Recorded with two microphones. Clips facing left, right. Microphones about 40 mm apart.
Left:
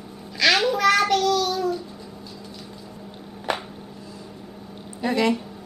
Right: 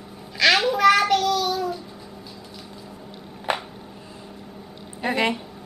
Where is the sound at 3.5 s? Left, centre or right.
Centre.